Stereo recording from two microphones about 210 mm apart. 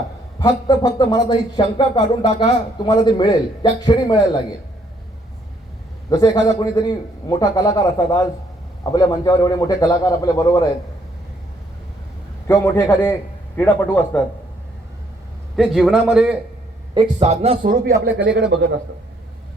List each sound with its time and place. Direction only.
0.3 s speech: 20° left (ahead or behind)
6.1 s a man's voice: 15° left (ahead or behind)
12.5 s a man's voice: 10° left (ahead or behind)
15.5 s a man's voice: centre (ahead or behind)
16.9 s a man's voice: 25° right (ahead or behind); by 18.6 s 55° right (ahead or behind)